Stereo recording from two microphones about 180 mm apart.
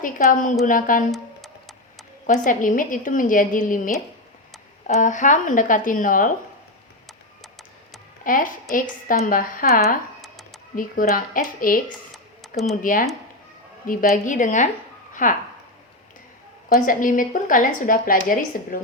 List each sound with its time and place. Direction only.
0.0 s a woman's voice: 45° left (ahead or behind)
1.1 s music: centre (ahead or behind)
2.2 s a woman's voice: 45° left (ahead or behind)
8.2 s a woman's voice: 50° left (ahead or behind)
10.2 s a sound: centre (ahead or behind)
10.8 s a woman's voice: 50° left (ahead or behind)
12.8 s a woman's voice: 50° left (ahead or behind)
15.1 s a sound: 50° left (ahead or behind)
16.8 s a woman's voice: 50° left (ahead or behind)